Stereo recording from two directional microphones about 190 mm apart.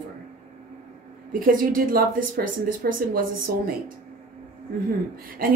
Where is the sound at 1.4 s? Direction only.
45° right (ahead or behind).